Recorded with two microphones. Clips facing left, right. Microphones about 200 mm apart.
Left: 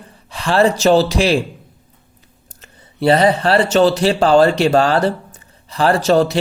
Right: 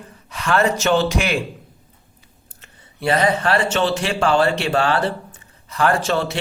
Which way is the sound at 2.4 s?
35° left (ahead or behind).